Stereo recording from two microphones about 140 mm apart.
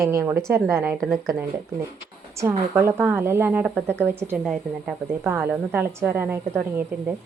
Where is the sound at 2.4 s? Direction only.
15° right (ahead or behind).